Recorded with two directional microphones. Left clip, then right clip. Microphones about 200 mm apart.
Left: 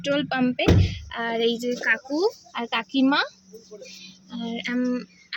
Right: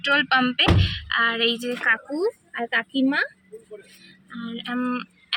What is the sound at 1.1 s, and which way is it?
Speech, 15° left (ahead or behind).